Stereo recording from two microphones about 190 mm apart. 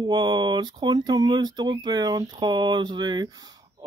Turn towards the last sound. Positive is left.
turn(degrees=-20)  # may be behind; listen again after turning